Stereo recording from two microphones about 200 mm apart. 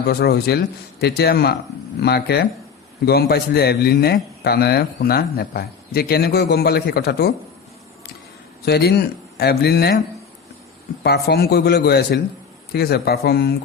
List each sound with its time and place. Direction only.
0.0 s a man's voice: 50° left (ahead or behind)
8.6 s a man's voice: 50° left (ahead or behind)
11.0 s a man's voice: 50° left (ahead or behind)